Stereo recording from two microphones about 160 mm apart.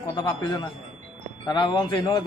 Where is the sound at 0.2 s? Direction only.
25° left (ahead or behind).